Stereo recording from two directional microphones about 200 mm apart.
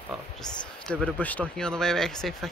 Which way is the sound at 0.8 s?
5° left (ahead or behind).